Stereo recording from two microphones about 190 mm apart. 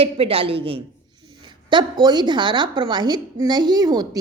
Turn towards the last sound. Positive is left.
turn(degrees=-20)  # may be behind; listen again after turning